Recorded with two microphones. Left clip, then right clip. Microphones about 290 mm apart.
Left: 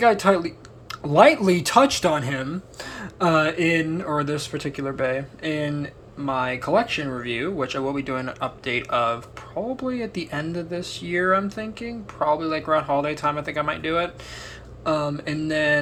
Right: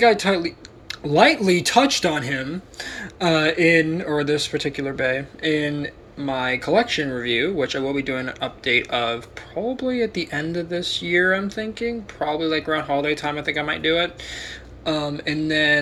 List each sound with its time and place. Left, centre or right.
0.0 s speech: centre